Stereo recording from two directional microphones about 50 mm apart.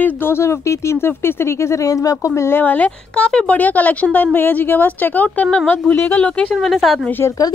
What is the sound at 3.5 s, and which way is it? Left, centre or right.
Speech, left.